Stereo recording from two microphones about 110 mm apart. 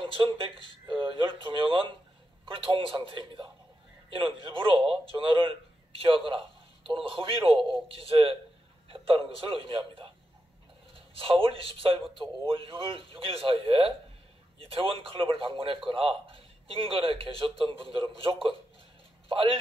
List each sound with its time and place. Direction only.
0.0 s a sound: 50° right (ahead or behind)
0.8 s a man's voice: 50° right (ahead or behind)
11.1 s speech: 55° right (ahead or behind)